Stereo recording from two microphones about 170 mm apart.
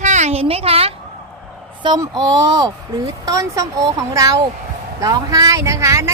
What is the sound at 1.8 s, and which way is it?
Speech, 25° right (ahead or behind).